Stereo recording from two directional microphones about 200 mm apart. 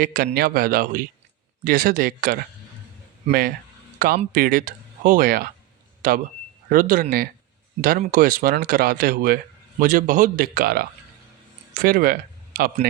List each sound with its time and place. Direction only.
0.0 s speech: 45° right (ahead or behind)
3.9 s a sound: 45° right (ahead or behind)
4.4 s speech: 45° right (ahead or behind)